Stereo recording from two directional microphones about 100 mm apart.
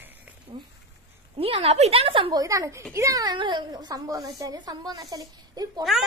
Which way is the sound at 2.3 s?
35° right (ahead or behind).